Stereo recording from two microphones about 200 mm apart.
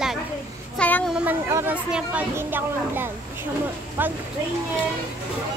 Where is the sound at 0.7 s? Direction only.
10° left (ahead or behind).